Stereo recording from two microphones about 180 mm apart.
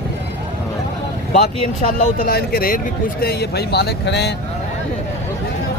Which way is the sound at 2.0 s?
55° left (ahead or behind).